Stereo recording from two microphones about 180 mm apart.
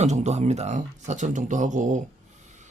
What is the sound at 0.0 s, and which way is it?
Speech, 40° right (ahead or behind).